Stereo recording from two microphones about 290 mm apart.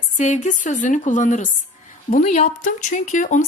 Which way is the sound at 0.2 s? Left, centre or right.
Left.